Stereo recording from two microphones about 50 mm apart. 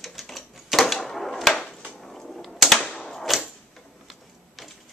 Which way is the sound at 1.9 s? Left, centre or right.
Centre.